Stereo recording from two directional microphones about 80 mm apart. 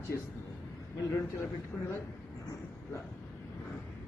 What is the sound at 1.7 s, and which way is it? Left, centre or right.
Speech, centre.